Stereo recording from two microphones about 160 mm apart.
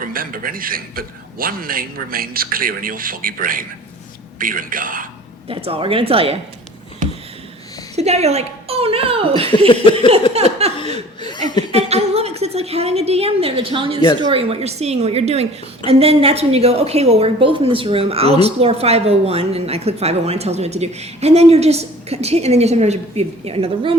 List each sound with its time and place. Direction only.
0.0 s a man's voice: 65° right (ahead or behind)
5.5 s a woman's voice: 35° right (ahead or behind)
7.9 s a woman's voice: 40° right (ahead or behind)
9.5 s chuckle: 30° left (ahead or behind)
10.3 s laughter: 40° right (ahead or behind)
11.2 s chuckle: 25° left (ahead or behind)
11.7 s a sound: 40° right (ahead or behind)
14.2 s a woman's voice: 30° right (ahead or behind)